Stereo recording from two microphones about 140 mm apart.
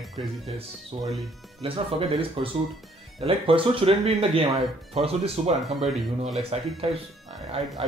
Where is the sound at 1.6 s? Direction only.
40° right (ahead or behind).